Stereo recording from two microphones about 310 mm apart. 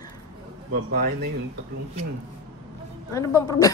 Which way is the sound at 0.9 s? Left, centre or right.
Right.